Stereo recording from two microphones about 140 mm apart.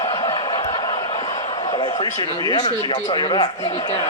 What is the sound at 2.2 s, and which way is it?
Speech, 30° left (ahead or behind).